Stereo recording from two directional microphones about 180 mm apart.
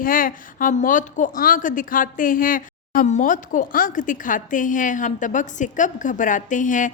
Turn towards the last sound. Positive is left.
turn(degrees=45)  # may be behind; listen again after turning